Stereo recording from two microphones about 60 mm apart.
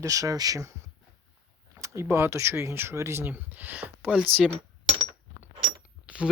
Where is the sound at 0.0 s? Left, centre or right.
Right.